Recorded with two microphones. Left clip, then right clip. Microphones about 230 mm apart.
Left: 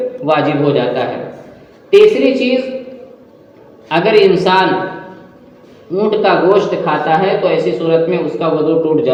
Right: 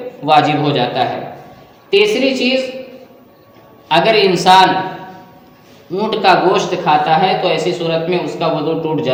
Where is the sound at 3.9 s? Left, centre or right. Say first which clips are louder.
Left 1 dB; right.